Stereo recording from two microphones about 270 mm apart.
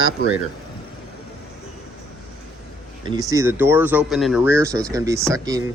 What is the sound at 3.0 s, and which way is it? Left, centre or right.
Speech, centre.